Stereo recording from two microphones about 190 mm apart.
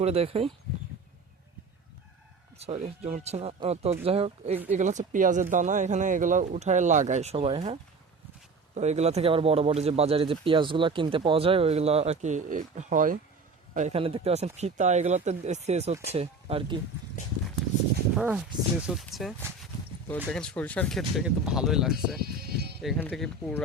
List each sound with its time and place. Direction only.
0.0 s speech: 30° right (ahead or behind)
2.6 s speech: 35° right (ahead or behind)
18.1 s speech: 5° right (ahead or behind)
22.2 s sheep: 55° right (ahead or behind)
22.8 s speech: 5° left (ahead or behind)